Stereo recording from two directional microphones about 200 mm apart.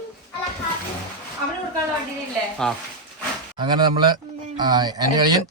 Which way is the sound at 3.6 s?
20° right (ahead or behind).